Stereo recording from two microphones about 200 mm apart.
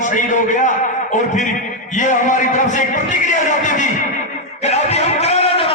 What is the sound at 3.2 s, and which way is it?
Music, 40° left (ahead or behind).